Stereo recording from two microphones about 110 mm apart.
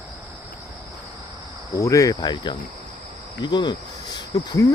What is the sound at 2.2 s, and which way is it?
Speech, 45° left (ahead or behind).